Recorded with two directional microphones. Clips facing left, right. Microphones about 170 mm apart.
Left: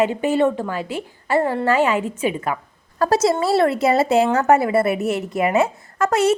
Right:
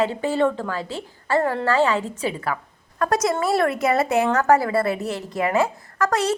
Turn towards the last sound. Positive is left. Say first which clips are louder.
# left 4 dB
turn(degrees=25)  # may be behind; listen again after turning